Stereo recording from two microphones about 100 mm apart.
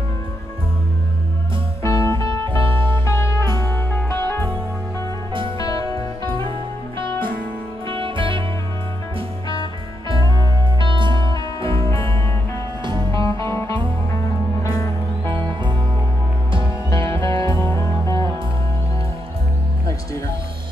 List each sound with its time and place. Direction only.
1.8 s music: 25° left (ahead or behind)
2.4 s music: 55° right (ahead or behind)
3.1 s music: 30° left (ahead or behind)
5.6 s music: 35° left (ahead or behind)
7.9 s music: 60° right (ahead or behind)
10.1 s music: 55° right (ahead or behind)
12.8 s music: 50° right (ahead or behind)
13.4 s music: 30° left (ahead or behind)
15.2 s music: 50° right (ahead or behind)
17.2 s music: 30° left (ahead or behind)